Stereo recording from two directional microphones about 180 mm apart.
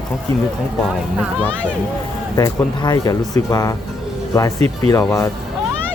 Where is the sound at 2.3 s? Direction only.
20° left (ahead or behind).